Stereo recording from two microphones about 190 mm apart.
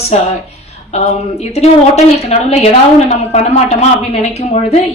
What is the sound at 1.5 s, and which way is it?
A woman's voice, 35° left (ahead or behind).